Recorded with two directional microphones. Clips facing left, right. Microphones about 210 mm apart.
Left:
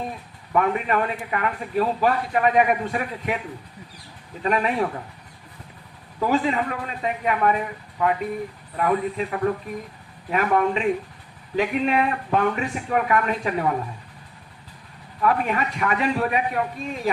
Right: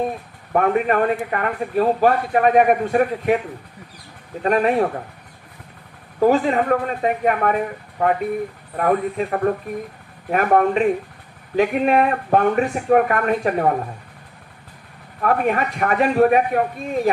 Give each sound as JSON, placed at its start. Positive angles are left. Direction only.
{"t": 0.5, "sound": "a man's voice", "side_deg": -50}
{"t": 4.4, "sound": "a man's voice", "side_deg": -50}
{"t": 6.2, "sound": "a man's voice", "side_deg": -50}
{"t": 15.2, "sound": "a man's voice", "side_deg": -50}